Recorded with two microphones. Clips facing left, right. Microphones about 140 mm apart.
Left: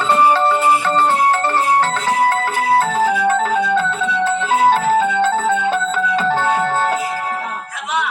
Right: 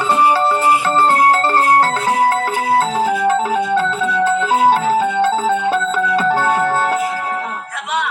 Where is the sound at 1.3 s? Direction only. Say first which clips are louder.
Right 2 dB; 40° right (ahead or behind).